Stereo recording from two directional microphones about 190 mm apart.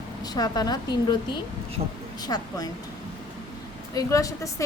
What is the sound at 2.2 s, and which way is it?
Speech, 20° left (ahead or behind).